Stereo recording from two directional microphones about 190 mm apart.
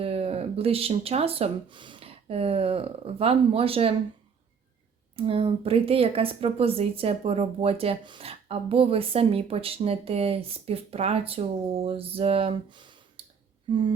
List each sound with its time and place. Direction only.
0.0 s speech: 30° right (ahead or behind)
5.1 s speech: 30° right (ahead or behind)